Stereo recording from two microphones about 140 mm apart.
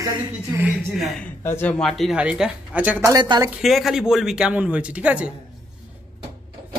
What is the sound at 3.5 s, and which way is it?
Speech, centre (ahead or behind).